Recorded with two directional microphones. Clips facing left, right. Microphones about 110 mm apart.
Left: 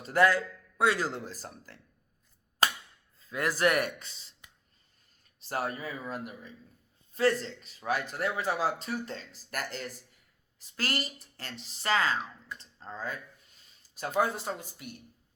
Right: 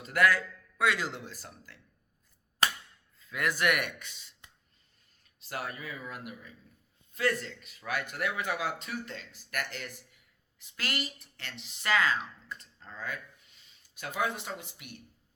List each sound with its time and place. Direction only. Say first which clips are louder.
0.0 s a man's voice: left 2 dB; 30° left (ahead or behind)
3.2 s speech: left 2 dB; 35° left (ahead or behind)
5.4 s a man's voice: left 5 dB; 35° left (ahead or behind)
14.2 s a man's voice: left 4 dB; 35° left (ahead or behind)